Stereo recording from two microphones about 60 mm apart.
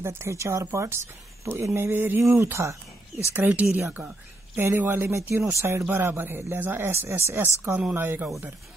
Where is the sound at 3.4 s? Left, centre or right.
Right.